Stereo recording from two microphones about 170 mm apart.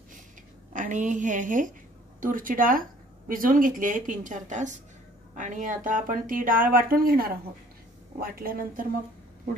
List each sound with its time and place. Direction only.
0.7 s a woman's voice: 45° right (ahead or behind)